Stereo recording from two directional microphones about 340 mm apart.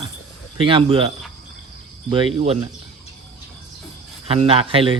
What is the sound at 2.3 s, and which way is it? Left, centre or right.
Speech, centre.